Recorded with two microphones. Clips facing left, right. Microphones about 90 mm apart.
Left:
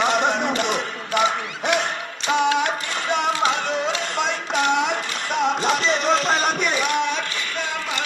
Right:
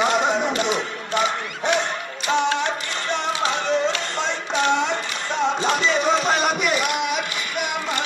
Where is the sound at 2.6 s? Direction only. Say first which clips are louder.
Left 2 dB; 10° left (ahead or behind); by 7.7 s 10° right (ahead or behind).